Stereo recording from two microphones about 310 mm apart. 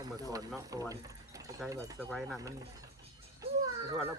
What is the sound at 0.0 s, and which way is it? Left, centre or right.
Speech, centre.